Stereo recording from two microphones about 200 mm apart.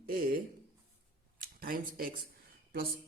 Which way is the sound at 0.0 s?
45° right (ahead or behind).